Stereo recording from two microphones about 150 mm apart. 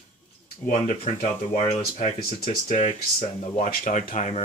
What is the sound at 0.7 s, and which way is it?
Speech, 55° left (ahead or behind).